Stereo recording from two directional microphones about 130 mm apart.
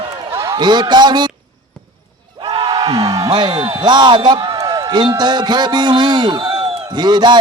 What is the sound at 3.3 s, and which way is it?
Speech, 35° right (ahead or behind).